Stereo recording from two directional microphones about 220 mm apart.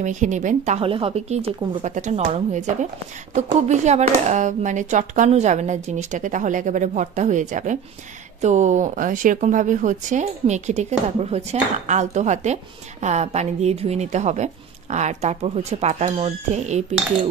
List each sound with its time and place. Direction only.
0.0 s speech: 35° right (ahead or behind)